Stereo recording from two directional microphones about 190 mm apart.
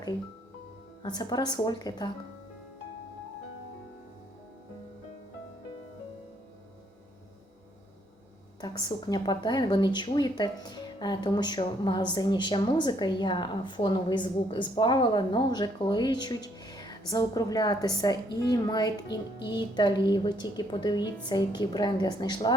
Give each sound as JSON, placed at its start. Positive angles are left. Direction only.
{"t": 1.0, "sound": "a woman's voice", "side_deg": 20}
{"t": 8.6, "sound": "a woman's voice", "side_deg": 20}